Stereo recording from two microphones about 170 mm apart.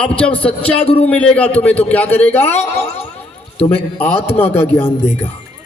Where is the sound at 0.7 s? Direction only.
35° left (ahead or behind).